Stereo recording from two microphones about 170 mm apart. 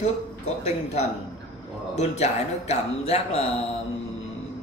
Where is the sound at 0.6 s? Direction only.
40° left (ahead or behind).